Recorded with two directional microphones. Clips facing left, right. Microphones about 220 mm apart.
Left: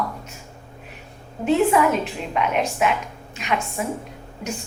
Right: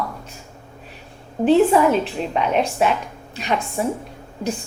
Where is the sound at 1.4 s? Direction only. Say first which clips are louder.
Right 4 dB; 35° right (ahead or behind).